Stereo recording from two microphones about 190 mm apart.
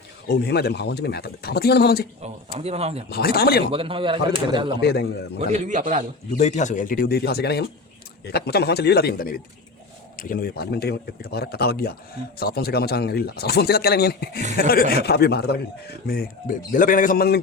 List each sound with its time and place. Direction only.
0.3 s speech: 60° left (ahead or behind)
2.2 s speech: 35° right (ahead or behind)
3.1 s speech: 55° left (ahead or behind)
3.7 s a man's voice: 30° right (ahead or behind)
4.8 s speech: 60° left (ahead or behind)
5.4 s speech: 35° right (ahead or behind)
6.4 s a man's voice: 40° left (ahead or behind)